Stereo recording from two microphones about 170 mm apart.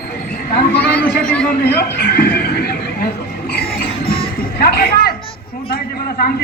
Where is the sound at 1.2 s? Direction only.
5° left (ahead or behind).